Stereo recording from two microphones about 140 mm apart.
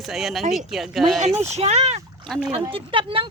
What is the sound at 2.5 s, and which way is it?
Speech, 40° right (ahead or behind).